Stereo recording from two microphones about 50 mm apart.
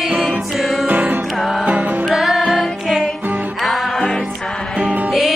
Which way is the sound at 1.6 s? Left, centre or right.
Right.